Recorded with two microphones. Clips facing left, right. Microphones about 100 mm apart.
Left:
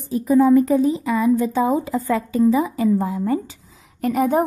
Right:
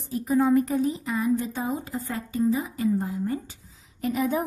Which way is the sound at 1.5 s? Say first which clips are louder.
Left 10 dB; 90° left.